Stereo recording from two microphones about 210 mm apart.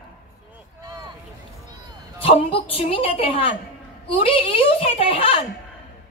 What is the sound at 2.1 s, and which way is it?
A woman's voice, 25° left (ahead or behind).